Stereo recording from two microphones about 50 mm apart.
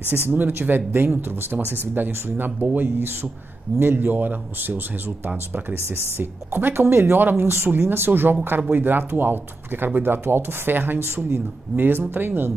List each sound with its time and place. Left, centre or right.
0.1 s speech: right
6.1 s speech: right